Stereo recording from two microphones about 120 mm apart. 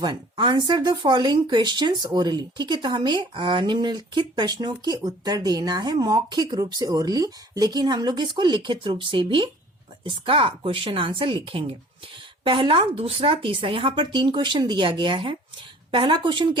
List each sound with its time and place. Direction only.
0.0 s speech: 40° right (ahead or behind)